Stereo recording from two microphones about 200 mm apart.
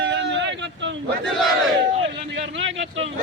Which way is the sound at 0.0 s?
60° right (ahead or behind).